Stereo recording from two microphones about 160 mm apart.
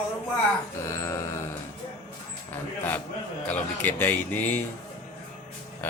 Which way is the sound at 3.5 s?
10° left (ahead or behind).